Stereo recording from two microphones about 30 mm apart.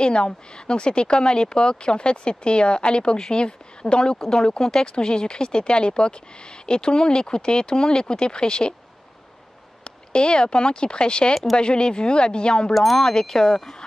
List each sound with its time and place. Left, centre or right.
0.0 s speech: left
9.8 s speech: left